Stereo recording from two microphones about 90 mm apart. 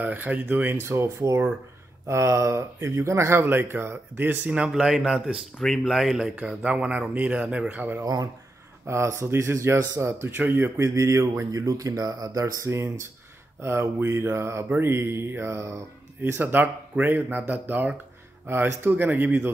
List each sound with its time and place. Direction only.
0.0 s speech: 20° right (ahead or behind)
0.8 s speech: 30° right (ahead or behind); by 4.7 s 15° right (ahead or behind)
4.7 s speech: 5° right (ahead or behind)
8.0 s speech: 45° right (ahead or behind)
8.8 s speech: 30° right (ahead or behind)